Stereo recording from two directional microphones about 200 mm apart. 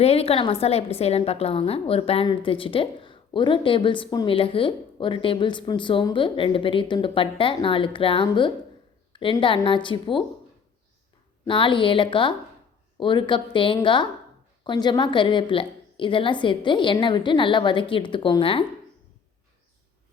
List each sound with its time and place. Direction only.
0.0 s a woman's voice: 30° left (ahead or behind)
11.4 s a woman's voice: 25° left (ahead or behind)